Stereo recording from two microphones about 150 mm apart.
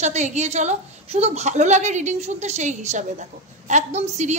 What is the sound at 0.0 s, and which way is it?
A woman's voice, 50° right (ahead or behind).